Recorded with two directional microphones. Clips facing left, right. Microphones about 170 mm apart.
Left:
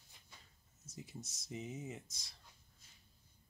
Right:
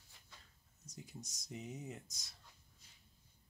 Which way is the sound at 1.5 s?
Centre (ahead or behind).